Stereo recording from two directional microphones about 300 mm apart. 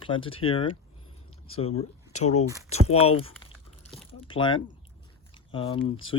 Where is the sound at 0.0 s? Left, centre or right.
Centre.